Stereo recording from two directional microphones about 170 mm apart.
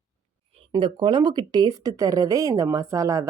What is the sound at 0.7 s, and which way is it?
Speech, 30° right (ahead or behind).